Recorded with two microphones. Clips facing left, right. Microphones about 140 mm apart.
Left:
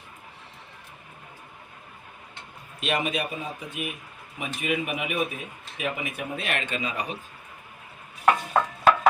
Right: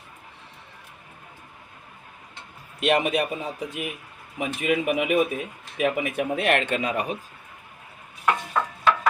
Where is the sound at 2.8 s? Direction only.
70° right (ahead or behind).